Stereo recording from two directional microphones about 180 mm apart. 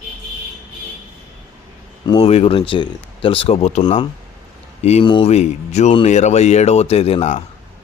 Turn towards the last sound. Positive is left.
turn(degrees=35)  # may be behind; listen again after turning